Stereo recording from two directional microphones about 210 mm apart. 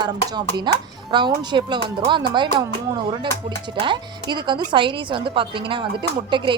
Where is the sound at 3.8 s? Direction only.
20° right (ahead or behind).